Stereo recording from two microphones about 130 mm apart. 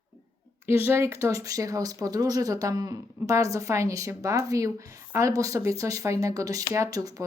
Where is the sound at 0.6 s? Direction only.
20° right (ahead or behind).